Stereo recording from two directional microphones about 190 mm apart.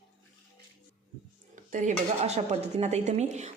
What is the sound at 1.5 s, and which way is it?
A woman's voice, 40° right (ahead or behind).